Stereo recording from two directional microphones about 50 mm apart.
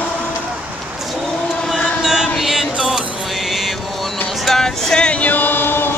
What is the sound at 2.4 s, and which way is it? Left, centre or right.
Mantra, centre.